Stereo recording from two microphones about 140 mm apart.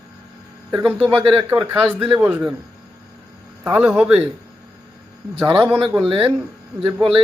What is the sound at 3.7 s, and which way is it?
Speech, 10° right (ahead or behind).